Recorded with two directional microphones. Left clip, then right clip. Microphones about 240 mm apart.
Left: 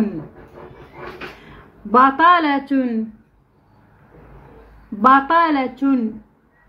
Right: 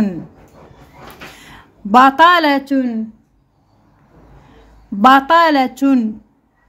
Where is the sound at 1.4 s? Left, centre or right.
Right.